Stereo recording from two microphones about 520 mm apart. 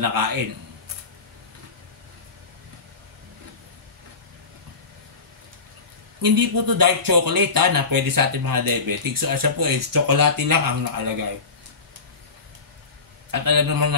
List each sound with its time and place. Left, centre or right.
0.0 s speech: right
6.2 s speech: right
13.3 s speech: right